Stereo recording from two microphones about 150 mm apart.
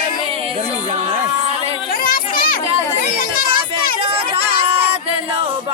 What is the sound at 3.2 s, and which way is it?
Music, 70° left (ahead or behind).